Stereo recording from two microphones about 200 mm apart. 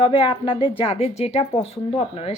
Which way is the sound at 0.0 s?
25° left (ahead or behind).